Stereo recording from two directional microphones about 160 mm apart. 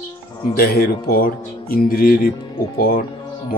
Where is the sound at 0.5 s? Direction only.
70° left (ahead or behind).